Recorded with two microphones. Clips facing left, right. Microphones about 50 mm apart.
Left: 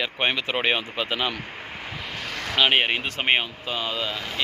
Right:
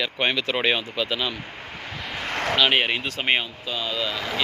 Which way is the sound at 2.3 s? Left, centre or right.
Right.